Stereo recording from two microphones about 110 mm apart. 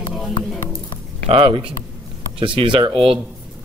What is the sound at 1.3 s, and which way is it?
A man's voice, 55° right (ahead or behind).